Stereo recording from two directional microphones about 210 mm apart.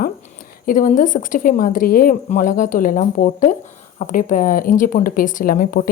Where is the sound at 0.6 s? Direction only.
40° left (ahead or behind).